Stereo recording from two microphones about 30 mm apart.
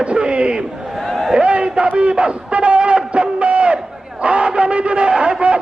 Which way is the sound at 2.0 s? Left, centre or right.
Right.